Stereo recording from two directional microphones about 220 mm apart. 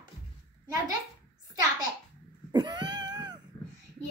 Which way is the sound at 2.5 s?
20° right (ahead or behind).